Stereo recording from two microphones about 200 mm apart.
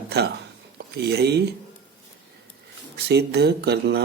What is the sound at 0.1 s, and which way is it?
Speech, 55° right (ahead or behind).